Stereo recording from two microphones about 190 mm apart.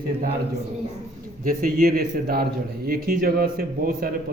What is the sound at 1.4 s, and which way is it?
A man's voice, 50° right (ahead or behind).